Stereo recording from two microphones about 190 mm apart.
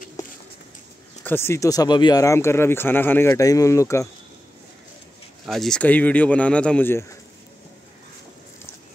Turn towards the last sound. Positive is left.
turn(degrees=10)  # may be behind; listen again after turning